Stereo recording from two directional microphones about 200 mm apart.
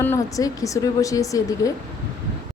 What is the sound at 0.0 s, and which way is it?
A woman's voice, 15° left (ahead or behind).